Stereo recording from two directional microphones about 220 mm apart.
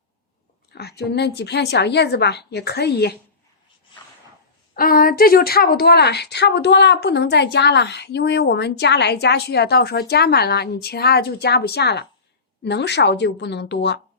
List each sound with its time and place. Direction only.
0.7 s speech: 45° left (ahead or behind)
4.7 s speech: 40° left (ahead or behind)